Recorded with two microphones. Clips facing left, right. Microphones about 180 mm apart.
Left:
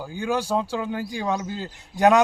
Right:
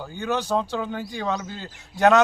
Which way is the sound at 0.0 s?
10° left (ahead or behind).